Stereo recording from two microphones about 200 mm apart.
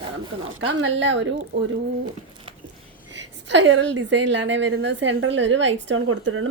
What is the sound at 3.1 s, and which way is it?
A woman's voice, 65° right (ahead or behind).